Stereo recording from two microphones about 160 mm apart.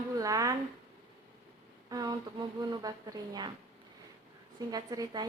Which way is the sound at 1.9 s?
25° right (ahead or behind).